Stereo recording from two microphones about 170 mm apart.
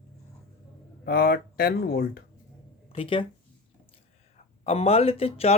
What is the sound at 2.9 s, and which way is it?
Speech, 30° left (ahead or behind).